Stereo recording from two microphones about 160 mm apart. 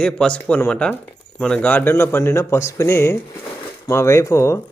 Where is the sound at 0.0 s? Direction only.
5° left (ahead or behind).